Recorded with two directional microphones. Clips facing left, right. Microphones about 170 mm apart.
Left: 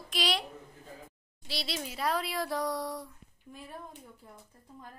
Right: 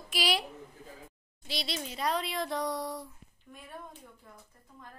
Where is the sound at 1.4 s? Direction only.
5° left (ahead or behind).